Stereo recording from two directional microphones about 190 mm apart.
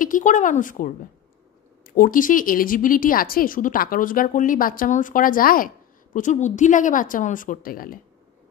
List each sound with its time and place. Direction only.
0.0 s speech: 45° left (ahead or behind)